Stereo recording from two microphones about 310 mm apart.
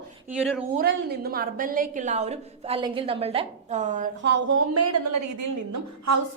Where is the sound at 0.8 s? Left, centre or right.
Right.